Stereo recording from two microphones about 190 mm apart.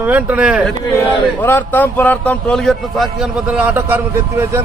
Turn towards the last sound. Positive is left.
turn(degrees=-15)  # may be behind; listen again after turning